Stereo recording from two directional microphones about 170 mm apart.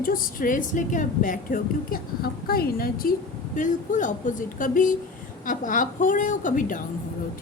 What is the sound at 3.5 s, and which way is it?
Speech, 50° left (ahead or behind).